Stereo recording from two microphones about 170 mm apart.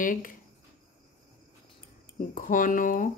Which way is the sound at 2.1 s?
50° left (ahead or behind).